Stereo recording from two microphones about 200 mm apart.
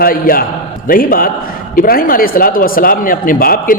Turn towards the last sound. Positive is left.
turn(degrees=45)  # may be behind; listen again after turning